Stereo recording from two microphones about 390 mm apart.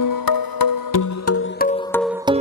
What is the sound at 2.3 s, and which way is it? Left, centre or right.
Music, centre.